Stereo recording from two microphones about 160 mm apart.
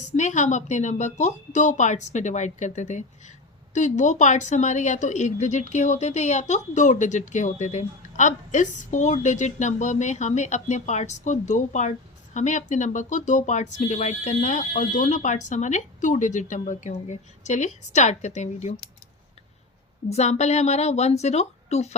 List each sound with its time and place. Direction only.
0.2 s speech: 50° left (ahead or behind)
20.1 s speech: 45° left (ahead or behind)